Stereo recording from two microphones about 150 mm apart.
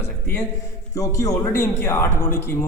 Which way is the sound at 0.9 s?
20° left (ahead or behind).